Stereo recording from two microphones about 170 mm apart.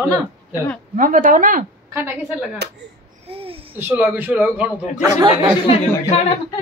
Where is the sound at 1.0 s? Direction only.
50° right (ahead or behind).